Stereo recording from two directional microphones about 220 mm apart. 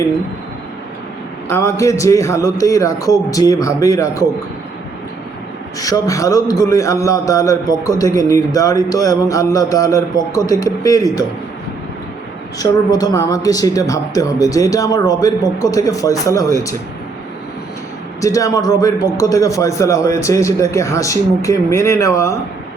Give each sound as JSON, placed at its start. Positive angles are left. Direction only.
{"t": 1.5, "sound": "a man's voice", "side_deg": 10}
{"t": 5.8, "sound": "a man's voice", "side_deg": 15}
{"t": 12.5, "sound": "a man's voice", "side_deg": 15}
{"t": 18.2, "sound": "a man's voice", "side_deg": 15}